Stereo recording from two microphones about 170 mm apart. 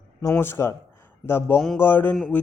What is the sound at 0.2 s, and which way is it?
Speech, 15° left (ahead or behind).